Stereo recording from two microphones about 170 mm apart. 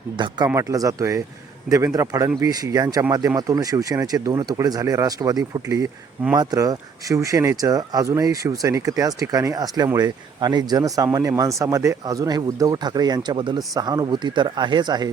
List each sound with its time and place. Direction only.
0.4 s speech: 20° right (ahead or behind)